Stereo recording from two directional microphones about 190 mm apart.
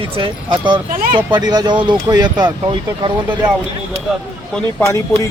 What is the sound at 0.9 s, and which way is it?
Speech, 45° right (ahead or behind).